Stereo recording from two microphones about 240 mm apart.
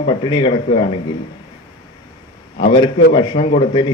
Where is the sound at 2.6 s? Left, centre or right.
Centre.